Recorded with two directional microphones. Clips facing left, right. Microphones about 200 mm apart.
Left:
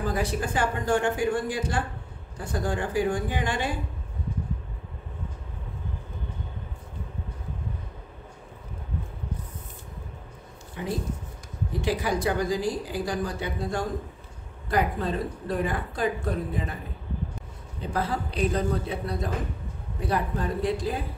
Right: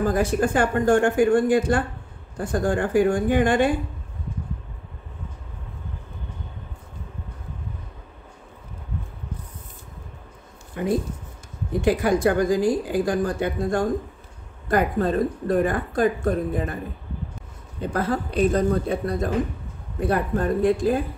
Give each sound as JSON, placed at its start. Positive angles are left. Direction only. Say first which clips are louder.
{"t": 0.0, "sound": "speech", "louder": "right 7 dB", "side_deg": -50}
{"t": 10.8, "sound": "speech", "louder": "right 7 dB", "side_deg": -55}
{"t": 17.9, "sound": "speech", "louder": "right 5 dB", "side_deg": -50}